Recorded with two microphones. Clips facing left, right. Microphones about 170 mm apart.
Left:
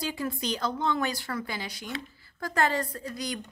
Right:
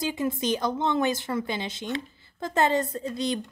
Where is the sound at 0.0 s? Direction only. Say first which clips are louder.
Right 4 dB; 20° right (ahead or behind).